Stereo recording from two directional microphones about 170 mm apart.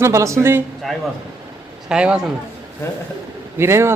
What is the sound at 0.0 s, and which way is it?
Speech, 15° right (ahead or behind).